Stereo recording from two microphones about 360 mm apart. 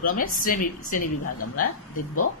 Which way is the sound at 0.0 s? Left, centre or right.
Left.